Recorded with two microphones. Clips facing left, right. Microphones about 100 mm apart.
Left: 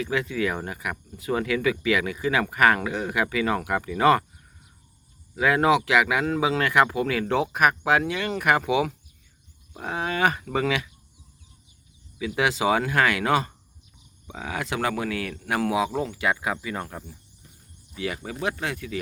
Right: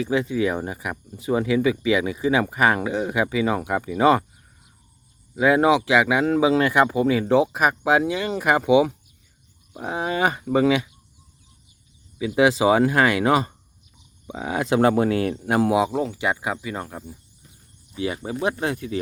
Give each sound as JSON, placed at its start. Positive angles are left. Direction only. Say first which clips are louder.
{"t": 0.0, "sound": "speech", "louder": "right 4 dB", "side_deg": -25}
{"t": 5.4, "sound": "speech", "louder": "right 3 dB", "side_deg": -20}
{"t": 12.4, "sound": "speech", "louder": "right 6 dB", "side_deg": -25}
{"t": 17.9, "sound": "speech", "louder": "right 4 dB", "side_deg": -25}